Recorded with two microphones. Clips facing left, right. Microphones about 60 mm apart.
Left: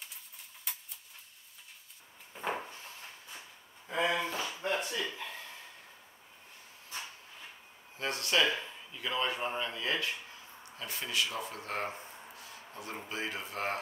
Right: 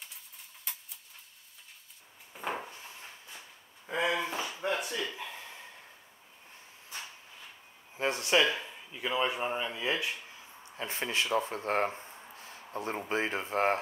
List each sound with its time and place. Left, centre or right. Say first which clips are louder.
0.7 s tick-tock: even; centre
2.3 s wood: even; centre
3.8 s a sound: right 1 dB; centre
8.0 s speech: right 3 dB; right
10.6 s speech: right 5 dB; right